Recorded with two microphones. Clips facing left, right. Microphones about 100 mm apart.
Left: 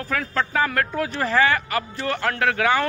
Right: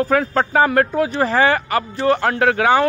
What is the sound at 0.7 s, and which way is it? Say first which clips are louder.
Speech: right 7 dB; 20° right (ahead or behind).